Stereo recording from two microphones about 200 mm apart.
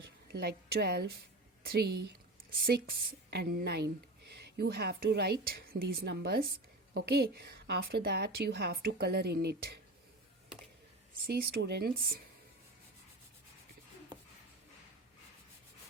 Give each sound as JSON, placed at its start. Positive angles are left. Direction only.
{"t": 0.3, "sound": "a woman's voice", "side_deg": -50}
{"t": 3.2, "sound": "a woman's voice", "side_deg": -50}
{"t": 11.3, "sound": "a woman's voice", "side_deg": -50}